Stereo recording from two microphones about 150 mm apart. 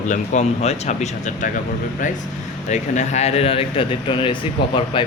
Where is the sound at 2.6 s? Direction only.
50° left (ahead or behind).